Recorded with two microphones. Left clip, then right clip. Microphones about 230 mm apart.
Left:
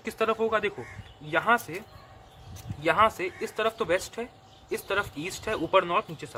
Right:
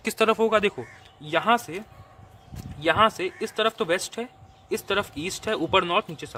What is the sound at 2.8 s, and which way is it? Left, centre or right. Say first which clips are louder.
Speech: right 2 dB; right.